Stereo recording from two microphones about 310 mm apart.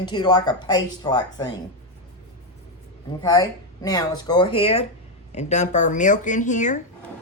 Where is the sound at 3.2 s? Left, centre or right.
Centre.